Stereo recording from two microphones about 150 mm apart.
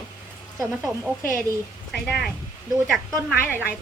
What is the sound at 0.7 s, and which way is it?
A woman's voice, 5° right (ahead or behind).